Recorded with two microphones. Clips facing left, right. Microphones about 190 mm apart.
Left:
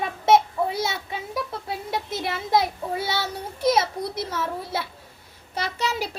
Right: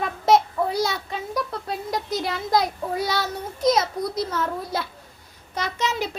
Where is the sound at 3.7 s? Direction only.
30° left (ahead or behind).